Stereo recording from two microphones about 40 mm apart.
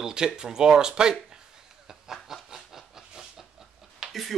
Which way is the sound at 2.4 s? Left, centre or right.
Centre.